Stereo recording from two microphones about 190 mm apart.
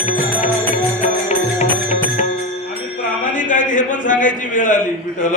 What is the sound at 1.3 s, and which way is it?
Music, 35° left (ahead or behind).